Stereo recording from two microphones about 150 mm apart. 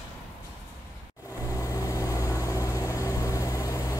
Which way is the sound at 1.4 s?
20° left (ahead or behind).